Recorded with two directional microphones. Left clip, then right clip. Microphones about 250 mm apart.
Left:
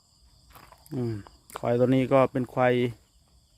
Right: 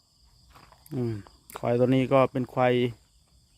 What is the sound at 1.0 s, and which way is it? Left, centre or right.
Speech, centre.